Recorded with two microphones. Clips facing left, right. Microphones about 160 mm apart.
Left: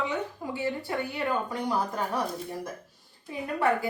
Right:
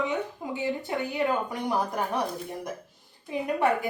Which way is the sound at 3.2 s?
20° right (ahead or behind).